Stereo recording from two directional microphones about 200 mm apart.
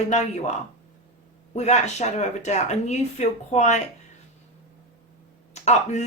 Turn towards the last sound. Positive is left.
turn(degrees=35)  # may be behind; listen again after turning